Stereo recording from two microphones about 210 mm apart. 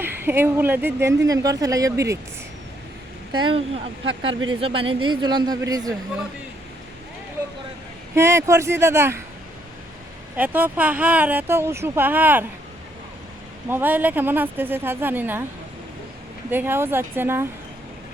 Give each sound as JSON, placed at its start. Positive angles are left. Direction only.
{"t": 0.0, "sound": "speech", "side_deg": -10}
{"t": 3.3, "sound": "speech", "side_deg": -20}
{"t": 4.6, "sound": "speech", "side_deg": -25}
{"t": 8.1, "sound": "speech", "side_deg": -15}
{"t": 10.3, "sound": "speech", "side_deg": -10}
{"t": 13.7, "sound": "speech", "side_deg": -10}
{"t": 16.5, "sound": "speech", "side_deg": -10}